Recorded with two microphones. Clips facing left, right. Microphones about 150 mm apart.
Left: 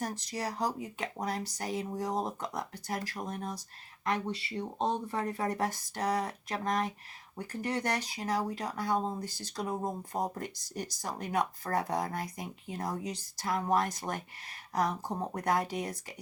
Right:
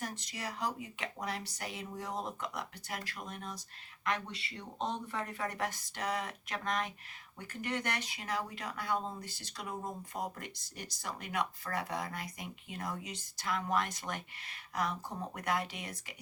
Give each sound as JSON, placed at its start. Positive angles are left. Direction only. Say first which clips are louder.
{"t": 0.0, "sound": "speech", "louder": "left 6 dB", "side_deg": 40}